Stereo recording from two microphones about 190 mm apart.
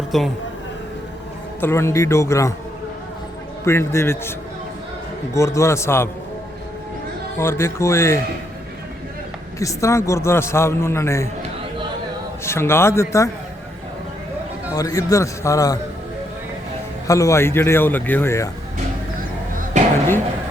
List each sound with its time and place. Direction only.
0.1 s a woman's voice: centre (ahead or behind)
1.6 s a man's voice: 15° left (ahead or behind)
3.6 s a man's voice: 15° left (ahead or behind)
7.3 s a man's voice: 15° left (ahead or behind)
9.6 s a man's voice: 15° left (ahead or behind)
12.5 s a man's voice: 15° left (ahead or behind)
14.7 s a man's voice: 20° left (ahead or behind)
17.1 s a man's voice: 15° left (ahead or behind)